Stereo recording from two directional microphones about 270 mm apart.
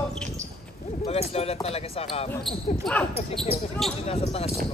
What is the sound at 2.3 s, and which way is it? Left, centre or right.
Speech, centre.